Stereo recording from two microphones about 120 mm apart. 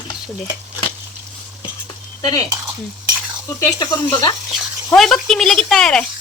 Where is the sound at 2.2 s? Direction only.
30° left (ahead or behind).